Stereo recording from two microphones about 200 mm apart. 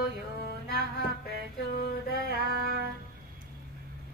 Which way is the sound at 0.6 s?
50° left (ahead or behind).